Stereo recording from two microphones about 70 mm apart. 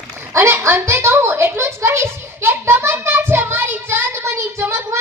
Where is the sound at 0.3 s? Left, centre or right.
Right.